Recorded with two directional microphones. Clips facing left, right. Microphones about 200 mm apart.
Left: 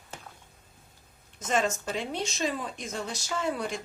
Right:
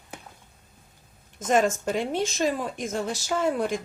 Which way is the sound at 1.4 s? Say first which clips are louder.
Right 6 dB; 50° right (ahead or behind).